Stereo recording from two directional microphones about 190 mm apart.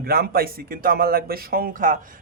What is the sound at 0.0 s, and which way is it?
A man's voice, 55° right (ahead or behind).